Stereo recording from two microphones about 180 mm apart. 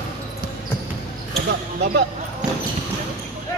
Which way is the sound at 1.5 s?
65° right (ahead or behind).